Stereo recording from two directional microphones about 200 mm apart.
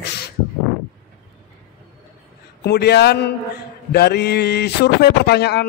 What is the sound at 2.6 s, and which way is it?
A man's voice, 55° left (ahead or behind).